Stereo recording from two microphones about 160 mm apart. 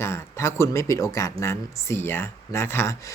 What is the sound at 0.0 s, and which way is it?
Speech, 15° left (ahead or behind).